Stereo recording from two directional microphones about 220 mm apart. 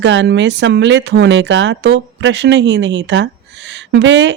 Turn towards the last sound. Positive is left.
turn(degrees=-55)  # may be behind; listen again after turning